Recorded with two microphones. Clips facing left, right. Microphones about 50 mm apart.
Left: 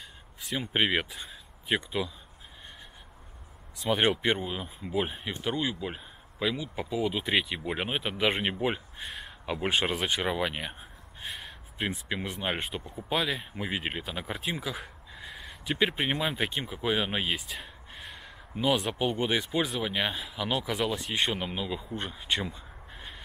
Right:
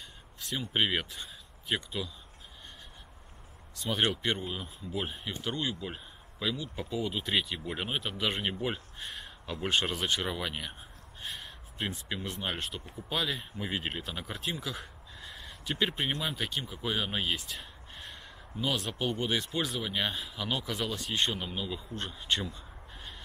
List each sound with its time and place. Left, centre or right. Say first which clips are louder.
0.6 s speech: left 3 dB; centre
3.7 s speech: left 4 dB; centre
18.6 s speech: left 5 dB; centre